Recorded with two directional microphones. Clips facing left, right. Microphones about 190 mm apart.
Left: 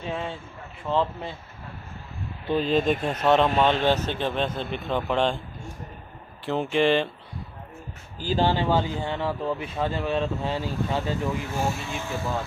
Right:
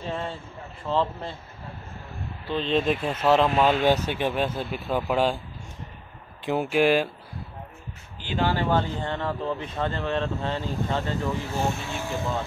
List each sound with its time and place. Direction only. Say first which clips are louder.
0.0 s speech: even; 5° left (ahead or behind)
2.4 s speech: left 2 dB; 10° left (ahead or behind)
6.4 s speech: right 1 dB; 10° right (ahead or behind)
8.2 s speech: left 3 dB; 35° left (ahead or behind)
8.5 s speech: left 1 dB; 10° left (ahead or behind)